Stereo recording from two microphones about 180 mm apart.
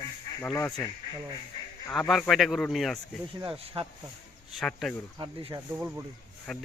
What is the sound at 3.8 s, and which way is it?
Speech, 30° right (ahead or behind).